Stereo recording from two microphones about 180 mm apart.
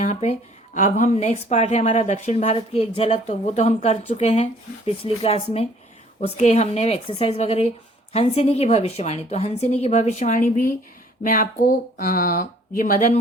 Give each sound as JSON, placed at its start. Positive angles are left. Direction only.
{"t": 0.0, "sound": "a woman's voice", "side_deg": 40}